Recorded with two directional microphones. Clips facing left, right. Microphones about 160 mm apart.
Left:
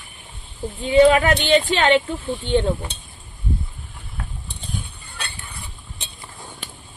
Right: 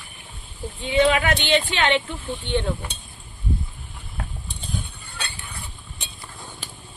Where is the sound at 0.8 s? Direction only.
40° left (ahead or behind).